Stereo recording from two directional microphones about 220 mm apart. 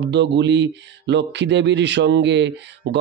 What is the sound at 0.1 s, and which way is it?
Speech, 50° right (ahead or behind).